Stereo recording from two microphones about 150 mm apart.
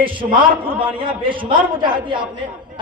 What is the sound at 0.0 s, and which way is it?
A man's voice, 35° right (ahead or behind).